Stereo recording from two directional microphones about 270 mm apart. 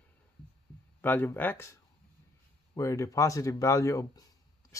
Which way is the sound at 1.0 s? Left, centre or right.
Centre.